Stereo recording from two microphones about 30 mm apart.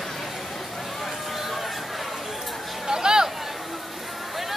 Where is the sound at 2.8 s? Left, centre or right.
Right.